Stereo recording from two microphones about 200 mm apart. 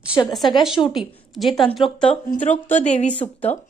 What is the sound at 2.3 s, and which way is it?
Speech, 35° left (ahead or behind).